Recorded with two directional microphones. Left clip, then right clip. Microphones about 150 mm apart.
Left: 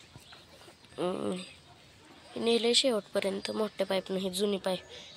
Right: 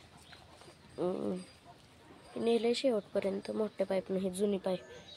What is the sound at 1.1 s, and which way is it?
Speech, 20° left (ahead or behind).